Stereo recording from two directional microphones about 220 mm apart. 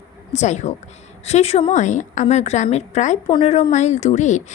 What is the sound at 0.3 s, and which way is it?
A woman's voice, 30° left (ahead or behind).